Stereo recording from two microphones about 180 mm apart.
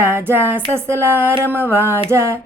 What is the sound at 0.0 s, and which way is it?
Music, 15° right (ahead or behind).